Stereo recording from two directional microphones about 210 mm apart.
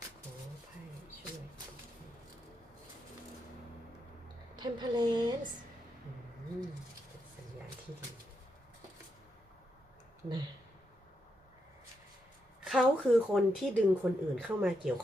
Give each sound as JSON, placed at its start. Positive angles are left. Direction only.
{"t": 4.5, "sound": "a woman's voice", "side_deg": -20}
{"t": 12.6, "sound": "speech", "side_deg": 0}